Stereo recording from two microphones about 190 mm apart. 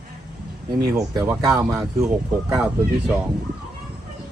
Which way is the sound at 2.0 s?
5° right (ahead or behind).